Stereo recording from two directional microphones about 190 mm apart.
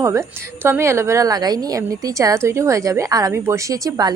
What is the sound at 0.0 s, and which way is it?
A woman's voice, 15° right (ahead or behind).